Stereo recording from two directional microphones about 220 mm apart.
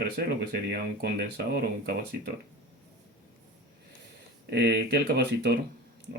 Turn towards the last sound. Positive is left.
turn(degrees=-45)  # may be behind; listen again after turning